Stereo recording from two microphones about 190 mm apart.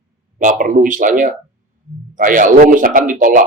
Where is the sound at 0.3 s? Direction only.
40° right (ahead or behind).